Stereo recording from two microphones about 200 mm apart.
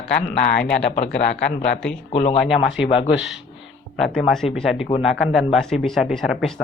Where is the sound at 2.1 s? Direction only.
30° left (ahead or behind).